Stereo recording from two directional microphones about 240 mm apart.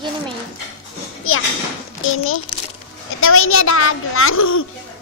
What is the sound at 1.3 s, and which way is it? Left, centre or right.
Speech, left.